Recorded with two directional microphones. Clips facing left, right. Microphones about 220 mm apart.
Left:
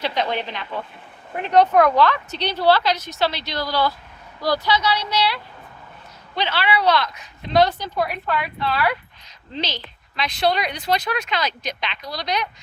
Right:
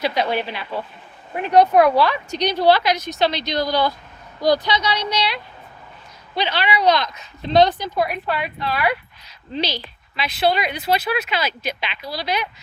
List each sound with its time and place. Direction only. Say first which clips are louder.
0.0 s a woman's voice: right 3 dB; 10° right (ahead or behind)